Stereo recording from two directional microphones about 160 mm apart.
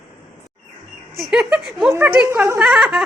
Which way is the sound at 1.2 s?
5° right (ahead or behind).